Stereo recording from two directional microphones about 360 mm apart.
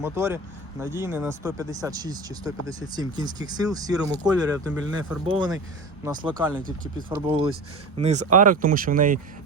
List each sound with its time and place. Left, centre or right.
0.0 s speech: centre
6.6 s speech: right